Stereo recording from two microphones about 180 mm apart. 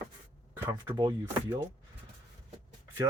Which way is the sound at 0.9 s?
20° right (ahead or behind).